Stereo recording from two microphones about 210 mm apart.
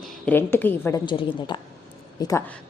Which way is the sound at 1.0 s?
20° left (ahead or behind).